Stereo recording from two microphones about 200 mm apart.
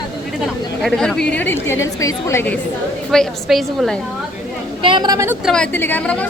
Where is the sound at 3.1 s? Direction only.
Centre (ahead or behind).